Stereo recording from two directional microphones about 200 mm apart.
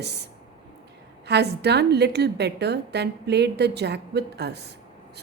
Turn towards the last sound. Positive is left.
turn(degrees=-55)  # may be behind; listen again after turning